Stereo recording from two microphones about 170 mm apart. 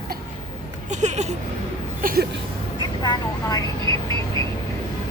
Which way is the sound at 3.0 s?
25° left (ahead or behind).